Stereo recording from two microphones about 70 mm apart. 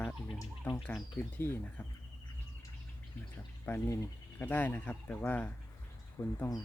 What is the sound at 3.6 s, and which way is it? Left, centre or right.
Speech, left.